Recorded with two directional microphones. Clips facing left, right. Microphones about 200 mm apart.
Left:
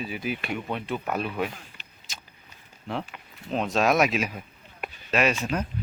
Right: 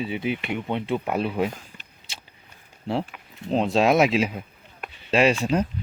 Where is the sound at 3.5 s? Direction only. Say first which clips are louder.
Right 4 dB; 30° right (ahead or behind).